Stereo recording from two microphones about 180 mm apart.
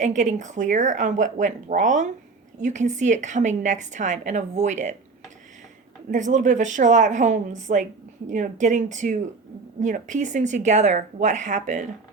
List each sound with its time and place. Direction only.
0.0 s a woman's voice: 45° right (ahead or behind)
6.1 s a woman's voice: 45° right (ahead or behind)